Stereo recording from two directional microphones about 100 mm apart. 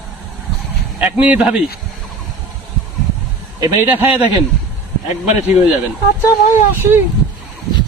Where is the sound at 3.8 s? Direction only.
20° right (ahead or behind).